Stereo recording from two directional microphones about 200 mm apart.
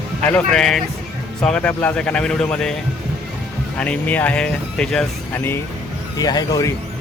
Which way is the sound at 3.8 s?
5° left (ahead or behind).